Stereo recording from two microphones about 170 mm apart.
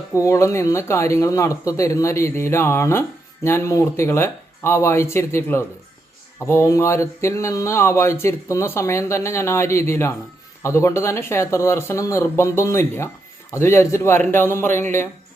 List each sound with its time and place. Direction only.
0.1 s speech: 15° left (ahead or behind)